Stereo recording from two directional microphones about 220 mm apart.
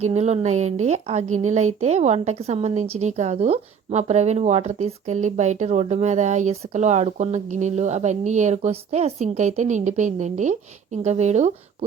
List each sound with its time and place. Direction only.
0.0 s speech: 30° right (ahead or behind)